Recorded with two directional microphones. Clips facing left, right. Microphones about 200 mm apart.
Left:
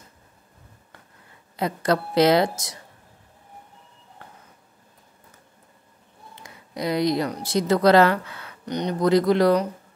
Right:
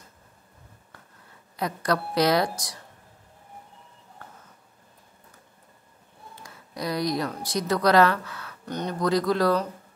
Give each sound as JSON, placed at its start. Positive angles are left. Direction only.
{"t": 1.6, "sound": "speech", "side_deg": 25}
{"t": 6.4, "sound": "speech", "side_deg": 20}